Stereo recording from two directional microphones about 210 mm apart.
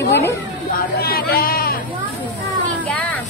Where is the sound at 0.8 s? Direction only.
45° left (ahead or behind).